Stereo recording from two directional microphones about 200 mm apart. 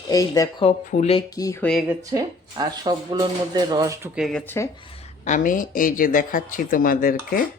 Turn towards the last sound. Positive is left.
turn(degrees=45)  # may be behind; listen again after turning